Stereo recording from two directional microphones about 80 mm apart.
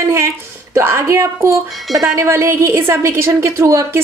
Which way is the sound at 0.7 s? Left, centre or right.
Right.